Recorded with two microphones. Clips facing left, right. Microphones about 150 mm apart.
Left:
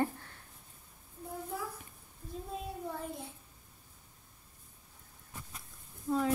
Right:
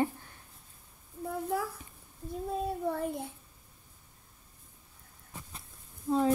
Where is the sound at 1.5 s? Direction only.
80° right.